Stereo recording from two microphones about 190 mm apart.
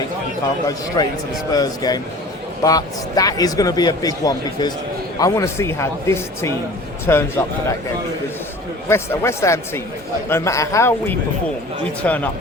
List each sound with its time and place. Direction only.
1.0 s a man's voice: 20° left (ahead or behind)
8.9 s a man's voice: 15° left (ahead or behind)